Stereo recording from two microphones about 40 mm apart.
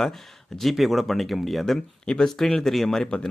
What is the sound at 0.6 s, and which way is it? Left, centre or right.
Speech, centre.